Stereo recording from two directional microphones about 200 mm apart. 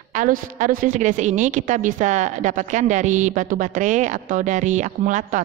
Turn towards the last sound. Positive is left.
turn(degrees=-40)  # may be behind; listen again after turning